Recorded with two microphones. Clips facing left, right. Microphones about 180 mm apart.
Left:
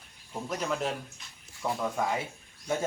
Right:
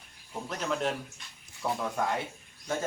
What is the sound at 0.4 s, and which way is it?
Speech, 5° left (ahead or behind).